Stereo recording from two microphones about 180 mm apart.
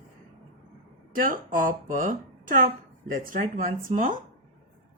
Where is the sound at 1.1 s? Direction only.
50° right (ahead or behind).